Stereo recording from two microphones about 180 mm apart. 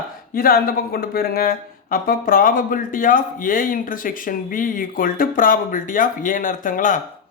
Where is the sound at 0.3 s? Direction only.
55° left (ahead or behind).